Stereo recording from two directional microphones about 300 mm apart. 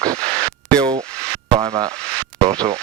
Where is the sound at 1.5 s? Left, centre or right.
Centre.